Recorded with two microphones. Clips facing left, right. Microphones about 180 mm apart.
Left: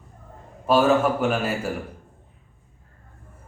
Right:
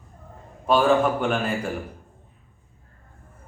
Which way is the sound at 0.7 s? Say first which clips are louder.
Left 1 dB; 5° left (ahead or behind).